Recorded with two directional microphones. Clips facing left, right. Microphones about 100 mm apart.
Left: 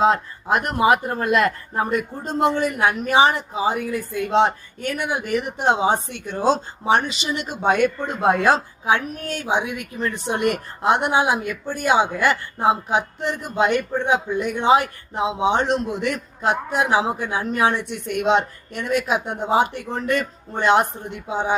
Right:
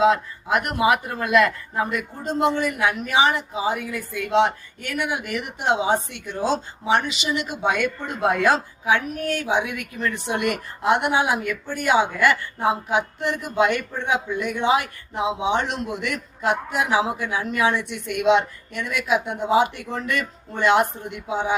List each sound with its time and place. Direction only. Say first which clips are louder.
0.0 s a man's voice: even; 40° left (ahead or behind)